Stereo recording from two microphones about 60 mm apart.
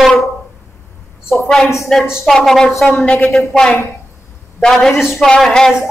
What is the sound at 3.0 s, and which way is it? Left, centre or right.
Speech, left.